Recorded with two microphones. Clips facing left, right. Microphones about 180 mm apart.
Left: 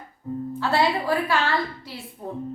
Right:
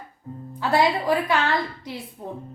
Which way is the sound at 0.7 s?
15° right (ahead or behind).